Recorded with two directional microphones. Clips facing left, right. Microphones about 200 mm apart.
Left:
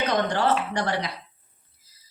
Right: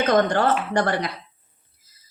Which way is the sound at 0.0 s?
50° right (ahead or behind).